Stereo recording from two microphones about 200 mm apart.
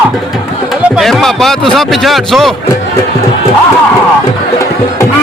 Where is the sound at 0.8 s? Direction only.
Centre (ahead or behind).